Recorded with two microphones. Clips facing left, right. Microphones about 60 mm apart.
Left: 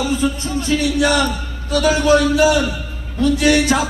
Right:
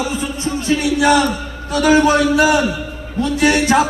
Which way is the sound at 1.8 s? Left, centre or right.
Right.